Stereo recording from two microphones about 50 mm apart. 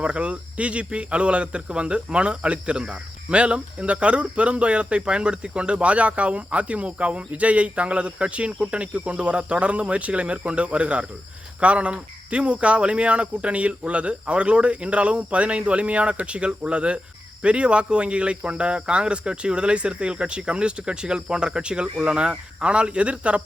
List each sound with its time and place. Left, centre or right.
0.0 s speech: right